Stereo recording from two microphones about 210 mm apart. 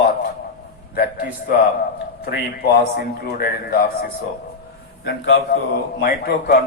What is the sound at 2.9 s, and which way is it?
A man's voice, 45° left (ahead or behind).